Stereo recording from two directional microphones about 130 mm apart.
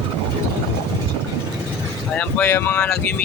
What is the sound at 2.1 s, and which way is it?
Speech, 15° left (ahead or behind).